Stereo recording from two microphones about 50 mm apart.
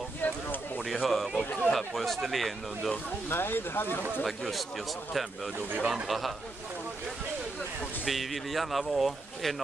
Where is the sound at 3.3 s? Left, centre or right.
Left.